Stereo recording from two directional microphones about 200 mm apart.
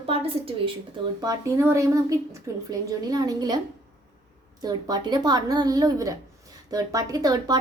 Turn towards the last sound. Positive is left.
turn(degrees=-20)  # may be behind; listen again after turning